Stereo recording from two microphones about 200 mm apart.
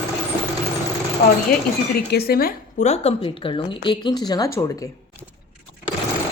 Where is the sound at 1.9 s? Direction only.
50° left (ahead or behind); by 4.8 s 15° left (ahead or behind).